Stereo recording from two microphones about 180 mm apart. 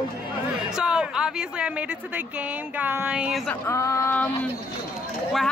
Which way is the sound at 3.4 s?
15° left (ahead or behind).